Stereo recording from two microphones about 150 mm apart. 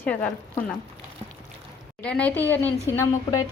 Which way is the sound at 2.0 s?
5° left (ahead or behind).